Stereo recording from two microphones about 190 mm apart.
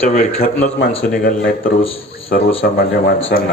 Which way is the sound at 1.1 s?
50° left (ahead or behind).